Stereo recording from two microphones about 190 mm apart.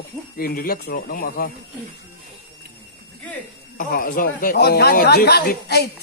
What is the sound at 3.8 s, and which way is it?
Speech, 45° left (ahead or behind).